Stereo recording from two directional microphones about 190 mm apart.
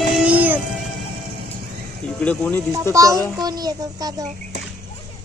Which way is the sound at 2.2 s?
5° left (ahead or behind).